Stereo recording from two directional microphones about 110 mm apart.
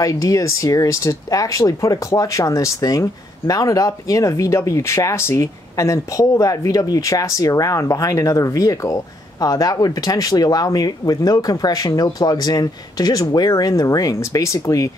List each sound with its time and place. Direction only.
0.0 s speech: 30° left (ahead or behind)